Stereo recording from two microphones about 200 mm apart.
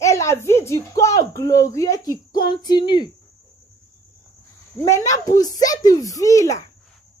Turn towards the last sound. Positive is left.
turn(degrees=15)  # may be behind; listen again after turning